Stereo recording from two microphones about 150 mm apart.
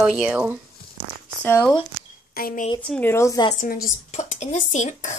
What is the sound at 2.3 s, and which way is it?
Speech, 70° left (ahead or behind).